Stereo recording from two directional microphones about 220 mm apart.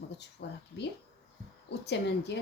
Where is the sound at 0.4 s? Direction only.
50° left (ahead or behind).